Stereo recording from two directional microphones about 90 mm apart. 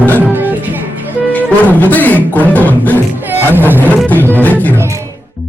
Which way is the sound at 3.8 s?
15° left (ahead or behind).